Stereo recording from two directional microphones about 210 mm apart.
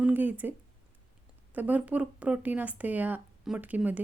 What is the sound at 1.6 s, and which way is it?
Speech, 10° right (ahead or behind).